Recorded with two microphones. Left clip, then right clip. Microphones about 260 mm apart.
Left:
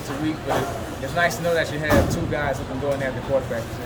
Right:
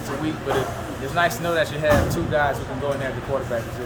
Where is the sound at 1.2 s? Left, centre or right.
Left.